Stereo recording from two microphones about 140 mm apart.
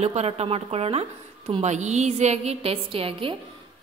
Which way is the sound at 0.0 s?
50° right (ahead or behind).